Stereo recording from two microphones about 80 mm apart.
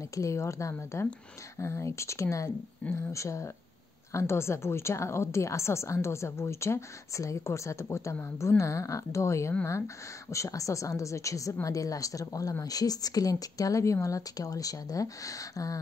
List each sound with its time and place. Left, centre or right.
0.1 s a woman's voice: left